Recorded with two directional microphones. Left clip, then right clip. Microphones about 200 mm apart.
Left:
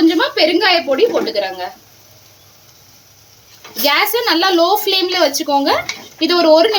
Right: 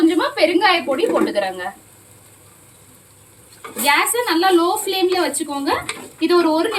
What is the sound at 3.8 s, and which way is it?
A woman's voice, 55° left (ahead or behind).